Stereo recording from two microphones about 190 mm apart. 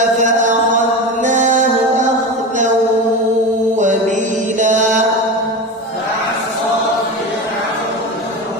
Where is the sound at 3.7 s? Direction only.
40° right (ahead or behind).